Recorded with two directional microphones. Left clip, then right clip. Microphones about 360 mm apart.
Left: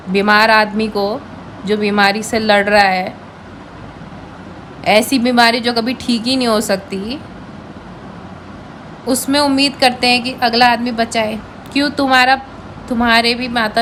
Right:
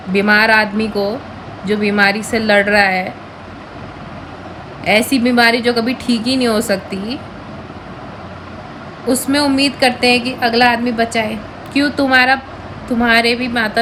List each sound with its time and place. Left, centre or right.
0.1 s a woman's voice: centre
4.8 s a woman's voice: centre
9.0 s a woman's voice: centre